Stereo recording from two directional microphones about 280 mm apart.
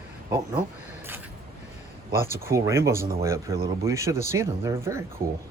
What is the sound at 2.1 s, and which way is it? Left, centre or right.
Speech, centre.